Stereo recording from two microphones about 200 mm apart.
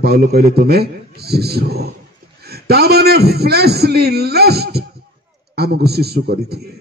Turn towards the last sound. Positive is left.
turn(degrees=-50)  # may be behind; listen again after turning